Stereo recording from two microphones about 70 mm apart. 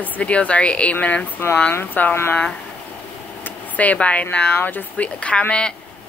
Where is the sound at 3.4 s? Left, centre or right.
Left.